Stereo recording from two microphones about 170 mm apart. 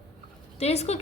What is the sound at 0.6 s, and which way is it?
Speech, 40° left (ahead or behind).